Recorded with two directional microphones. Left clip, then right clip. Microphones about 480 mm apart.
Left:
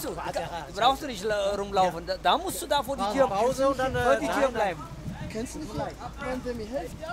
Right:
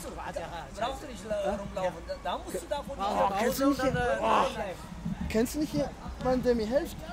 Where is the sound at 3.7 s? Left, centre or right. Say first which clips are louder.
Left 4 dB; left.